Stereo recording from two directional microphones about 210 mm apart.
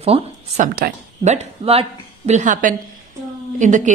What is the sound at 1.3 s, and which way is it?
Speech, 30° right (ahead or behind).